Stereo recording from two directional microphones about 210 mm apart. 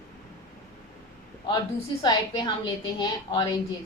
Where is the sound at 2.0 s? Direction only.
20° left (ahead or behind).